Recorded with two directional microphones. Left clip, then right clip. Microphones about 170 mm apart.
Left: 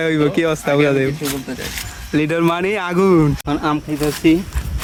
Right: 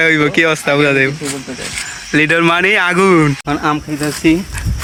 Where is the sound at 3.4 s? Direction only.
10° right (ahead or behind).